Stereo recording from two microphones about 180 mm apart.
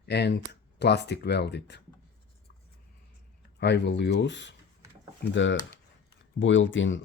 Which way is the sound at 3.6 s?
75° left (ahead or behind).